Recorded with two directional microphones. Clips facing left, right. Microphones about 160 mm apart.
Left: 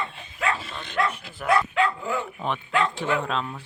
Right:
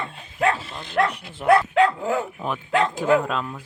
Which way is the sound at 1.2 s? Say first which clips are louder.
Right 2 dB; 25° right (ahead or behind).